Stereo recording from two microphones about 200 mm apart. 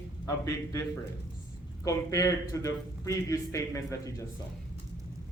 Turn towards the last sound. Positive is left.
turn(degrees=15)  # may be behind; listen again after turning